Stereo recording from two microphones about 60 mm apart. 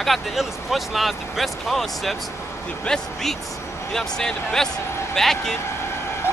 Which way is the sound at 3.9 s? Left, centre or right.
Centre.